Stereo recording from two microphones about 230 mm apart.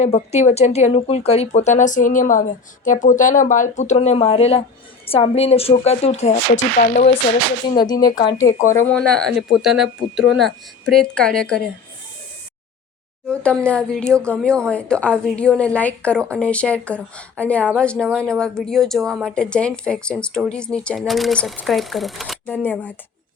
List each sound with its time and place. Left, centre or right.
0.0 s speech: left
7.7 s speech: centre
13.2 s speech: centre